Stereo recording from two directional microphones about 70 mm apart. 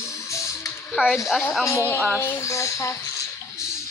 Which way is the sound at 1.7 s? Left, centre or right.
Left.